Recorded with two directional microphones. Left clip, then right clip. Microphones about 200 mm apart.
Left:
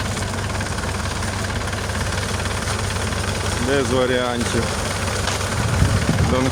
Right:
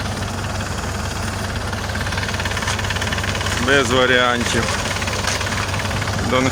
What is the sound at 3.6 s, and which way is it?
Speech, centre (ahead or behind).